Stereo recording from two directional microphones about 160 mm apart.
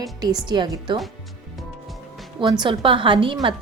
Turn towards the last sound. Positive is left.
turn(degrees=-30)  # may be behind; listen again after turning